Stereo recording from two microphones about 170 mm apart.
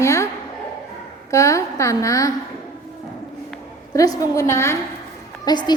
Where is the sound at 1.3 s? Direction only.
20° left (ahead or behind).